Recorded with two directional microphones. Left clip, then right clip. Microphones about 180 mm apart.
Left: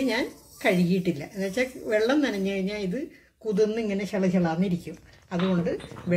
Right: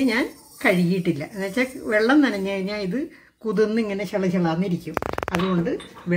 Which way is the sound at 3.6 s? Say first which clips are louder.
Right 3 dB; 55° right (ahead or behind).